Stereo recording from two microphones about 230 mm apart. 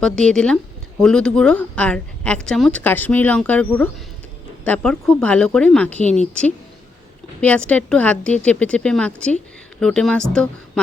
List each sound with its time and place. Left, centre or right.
0.0 s speech: centre